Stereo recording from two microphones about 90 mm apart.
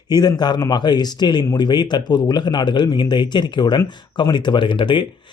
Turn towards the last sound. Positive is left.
turn(degrees=65)  # may be behind; listen again after turning